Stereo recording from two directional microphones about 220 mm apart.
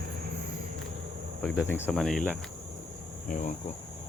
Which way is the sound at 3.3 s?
35° left (ahead or behind).